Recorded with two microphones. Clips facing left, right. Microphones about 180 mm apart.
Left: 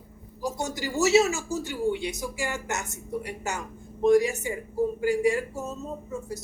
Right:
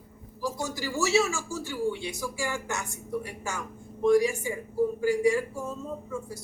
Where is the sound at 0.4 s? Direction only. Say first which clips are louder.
Left 1 dB; 20° left (ahead or behind).